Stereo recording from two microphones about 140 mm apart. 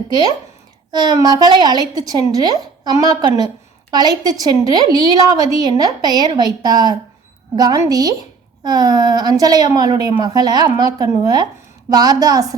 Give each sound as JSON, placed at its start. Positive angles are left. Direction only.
{"t": 0.1, "sound": "a woman's voice", "side_deg": -30}